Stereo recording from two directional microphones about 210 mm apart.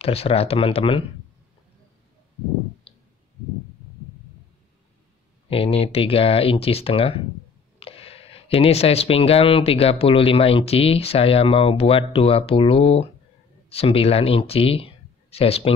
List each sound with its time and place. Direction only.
0.0 s speech: 30° left (ahead or behind)
5.5 s speech: 25° left (ahead or behind)